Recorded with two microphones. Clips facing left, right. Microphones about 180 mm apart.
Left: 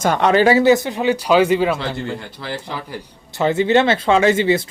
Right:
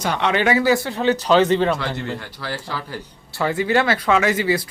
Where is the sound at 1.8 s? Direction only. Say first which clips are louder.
Left 2 dB; 25° left (ahead or behind).